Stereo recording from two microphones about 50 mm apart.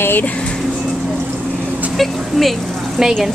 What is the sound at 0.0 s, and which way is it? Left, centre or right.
Speech, left.